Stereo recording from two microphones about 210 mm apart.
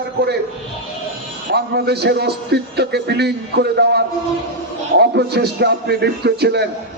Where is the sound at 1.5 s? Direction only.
50° right (ahead or behind).